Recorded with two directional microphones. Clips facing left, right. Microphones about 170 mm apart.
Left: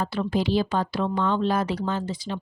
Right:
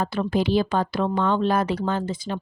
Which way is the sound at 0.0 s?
55° right (ahead or behind).